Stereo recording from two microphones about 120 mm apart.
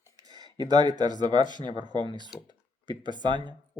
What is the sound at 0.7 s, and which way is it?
Speech, 35° right (ahead or behind).